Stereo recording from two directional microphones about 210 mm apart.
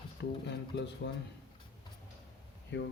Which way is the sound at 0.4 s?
55° left (ahead or behind).